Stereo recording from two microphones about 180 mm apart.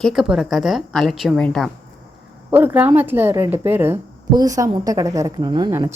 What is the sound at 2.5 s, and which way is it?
A woman's voice, 10° right (ahead or behind).